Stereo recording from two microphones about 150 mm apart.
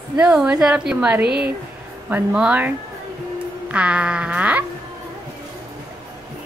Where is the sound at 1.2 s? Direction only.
90° right.